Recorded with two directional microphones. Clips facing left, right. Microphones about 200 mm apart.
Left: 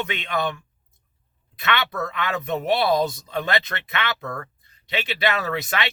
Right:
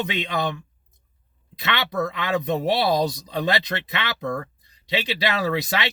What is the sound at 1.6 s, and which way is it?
Speech, 20° right (ahead or behind).